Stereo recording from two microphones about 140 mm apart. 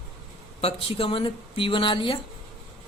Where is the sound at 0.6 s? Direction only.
40° left (ahead or behind).